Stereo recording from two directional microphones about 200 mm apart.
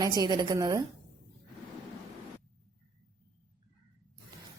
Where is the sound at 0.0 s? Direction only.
20° right (ahead or behind).